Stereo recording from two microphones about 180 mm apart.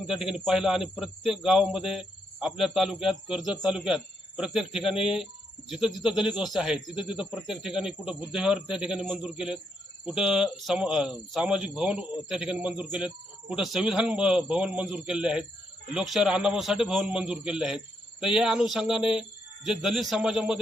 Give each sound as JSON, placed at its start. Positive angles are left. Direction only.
{"t": 0.1, "sound": "speech", "side_deg": -5}